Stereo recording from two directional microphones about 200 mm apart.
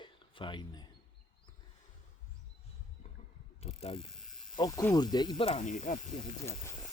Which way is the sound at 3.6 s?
30° left (ahead or behind).